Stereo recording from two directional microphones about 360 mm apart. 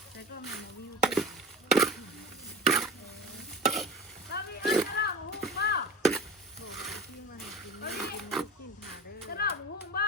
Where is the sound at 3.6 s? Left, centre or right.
Centre.